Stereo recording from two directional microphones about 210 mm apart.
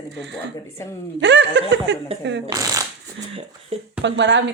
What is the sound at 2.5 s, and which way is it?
Speech, 15° right (ahead or behind).